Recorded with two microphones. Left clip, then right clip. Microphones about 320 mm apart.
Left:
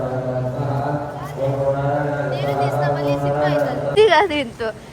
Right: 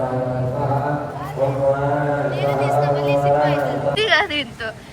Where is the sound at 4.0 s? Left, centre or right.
Left.